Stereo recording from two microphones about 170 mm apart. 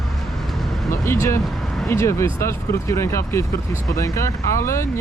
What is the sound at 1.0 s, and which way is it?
Speech, 15° left (ahead or behind).